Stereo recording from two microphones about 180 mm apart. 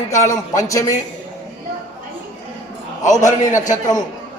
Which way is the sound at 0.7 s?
20° left (ahead or behind).